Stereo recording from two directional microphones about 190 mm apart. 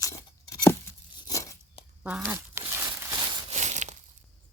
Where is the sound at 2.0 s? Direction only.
5° right (ahead or behind).